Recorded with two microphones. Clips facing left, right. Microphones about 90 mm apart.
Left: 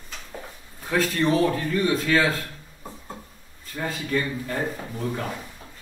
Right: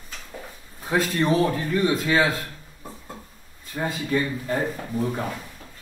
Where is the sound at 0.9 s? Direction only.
25° right (ahead or behind).